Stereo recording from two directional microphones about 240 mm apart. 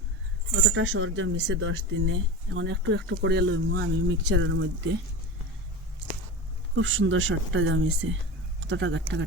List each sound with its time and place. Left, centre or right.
0.5 s speech: right
6.7 s speech: right